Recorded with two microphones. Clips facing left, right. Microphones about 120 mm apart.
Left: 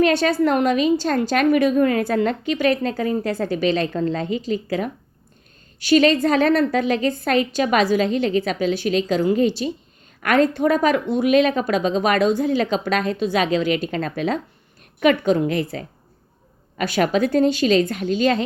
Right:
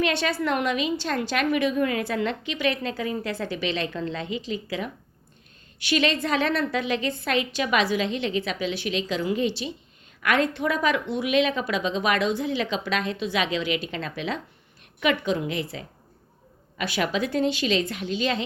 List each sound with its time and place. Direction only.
0.0 s a woman's voice: 40° left (ahead or behind)